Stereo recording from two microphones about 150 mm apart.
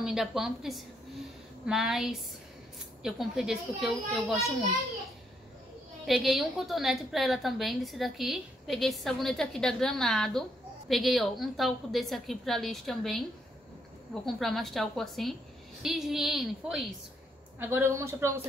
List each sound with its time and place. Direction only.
0.0 s a woman's voice: 5° right (ahead or behind)
6.0 s a woman's voice: 5° right (ahead or behind)
14.2 s a woman's voice: centre (ahead or behind)
17.6 s speech: 15° right (ahead or behind)